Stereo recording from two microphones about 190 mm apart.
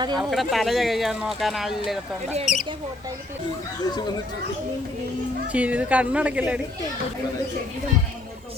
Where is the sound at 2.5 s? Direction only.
40° left (ahead or behind).